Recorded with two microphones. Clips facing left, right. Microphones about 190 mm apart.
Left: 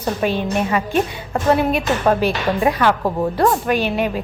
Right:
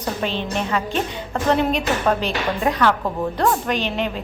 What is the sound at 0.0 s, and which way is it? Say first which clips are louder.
A woman's voice: left 4 dB; 10° left (ahead or behind).